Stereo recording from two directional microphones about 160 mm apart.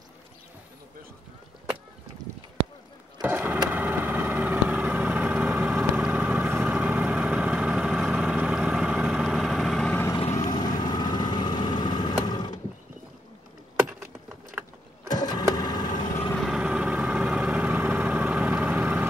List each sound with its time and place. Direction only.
3.2 s a sound: 10° right (ahead or behind)
3.7 s vehicle: 10° right (ahead or behind); by 10.0 s 5° left (ahead or behind)
10.3 s vehicle: 25° left (ahead or behind)
15.0 s vehicle: 25° left (ahead or behind)
16.3 s vehicle: 5° right (ahead or behind)